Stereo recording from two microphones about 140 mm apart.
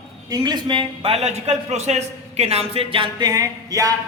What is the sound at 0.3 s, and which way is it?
A man's voice, 25° right (ahead or behind).